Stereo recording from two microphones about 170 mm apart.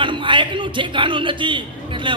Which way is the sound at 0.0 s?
30° right (ahead or behind).